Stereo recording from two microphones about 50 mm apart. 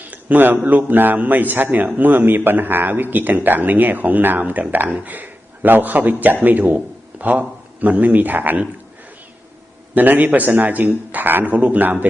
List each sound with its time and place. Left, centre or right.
0.0 s a man's voice: right
9.9 s speech: right